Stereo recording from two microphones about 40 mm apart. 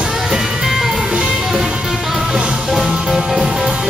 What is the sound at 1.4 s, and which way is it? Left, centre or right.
Music, centre.